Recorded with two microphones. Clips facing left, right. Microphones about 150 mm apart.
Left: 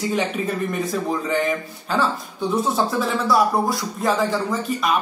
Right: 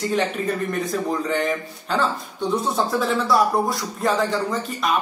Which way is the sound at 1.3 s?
Centre (ahead or behind).